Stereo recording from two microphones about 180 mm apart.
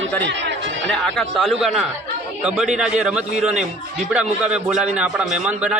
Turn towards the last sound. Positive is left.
turn(degrees=-5)  # may be behind; listen again after turning